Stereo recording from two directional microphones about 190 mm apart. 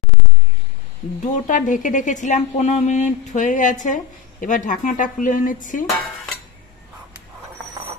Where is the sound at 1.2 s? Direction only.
45° left (ahead or behind).